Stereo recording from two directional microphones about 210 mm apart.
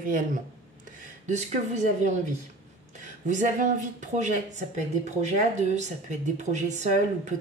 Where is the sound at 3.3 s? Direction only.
35° right (ahead or behind).